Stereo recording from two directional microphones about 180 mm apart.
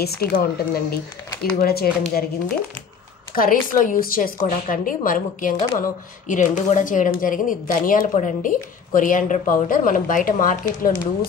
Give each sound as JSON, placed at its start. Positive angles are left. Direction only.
{"t": 0.0, "sound": "speech", "side_deg": 60}
{"t": 3.3, "sound": "speech", "side_deg": 50}